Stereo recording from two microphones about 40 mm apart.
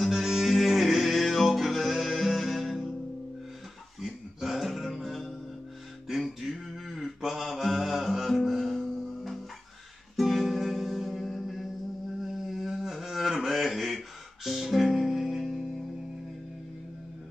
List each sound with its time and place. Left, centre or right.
0.1 s music: centre
4.0 s music: centre
6.1 s mantra: centre
10.1 s music: centre
12.2 s a sound: centre